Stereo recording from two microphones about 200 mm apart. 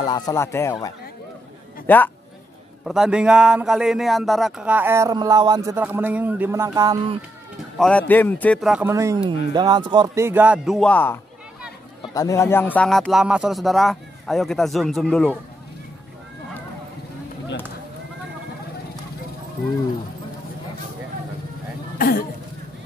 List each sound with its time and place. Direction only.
0.1 s speech: 15° left (ahead or behind)
2.8 s speech: centre (ahead or behind); by 7.2 s 20° right (ahead or behind)
7.7 s speech: 5° left (ahead or behind)
8.8 s speech: 15° right (ahead or behind); by 15.3 s 5° left (ahead or behind)
21.9 s cough: 45° left (ahead or behind)